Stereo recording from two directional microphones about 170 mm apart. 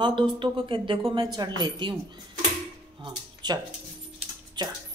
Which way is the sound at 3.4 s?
25° right (ahead or behind).